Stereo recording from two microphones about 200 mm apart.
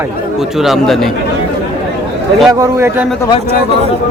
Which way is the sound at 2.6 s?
15° right (ahead or behind).